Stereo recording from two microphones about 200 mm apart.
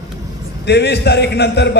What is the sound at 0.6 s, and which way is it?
A man's voice, 55° left (ahead or behind).